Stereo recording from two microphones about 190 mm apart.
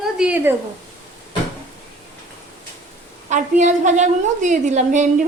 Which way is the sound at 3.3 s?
40° right (ahead or behind).